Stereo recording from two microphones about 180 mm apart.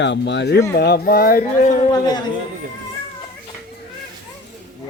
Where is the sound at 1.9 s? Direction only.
20° left (ahead or behind).